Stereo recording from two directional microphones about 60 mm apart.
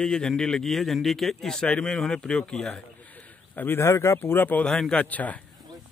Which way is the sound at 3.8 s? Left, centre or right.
Left.